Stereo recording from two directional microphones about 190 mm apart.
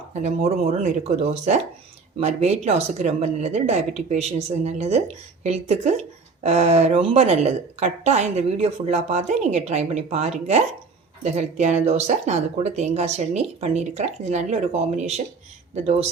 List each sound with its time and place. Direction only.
0.1 s a woman's voice: 35° right (ahead or behind)